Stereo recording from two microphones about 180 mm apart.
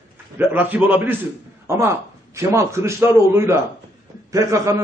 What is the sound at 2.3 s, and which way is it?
A man's voice, 15° right (ahead or behind).